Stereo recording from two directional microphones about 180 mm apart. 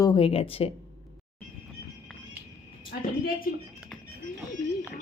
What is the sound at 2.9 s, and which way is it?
Speech, 60° left (ahead or behind).